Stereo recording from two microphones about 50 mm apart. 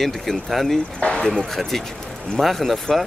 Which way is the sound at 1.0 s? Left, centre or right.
Left.